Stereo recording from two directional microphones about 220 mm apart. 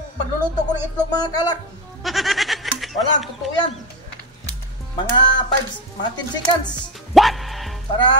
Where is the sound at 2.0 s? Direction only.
Centre (ahead or behind).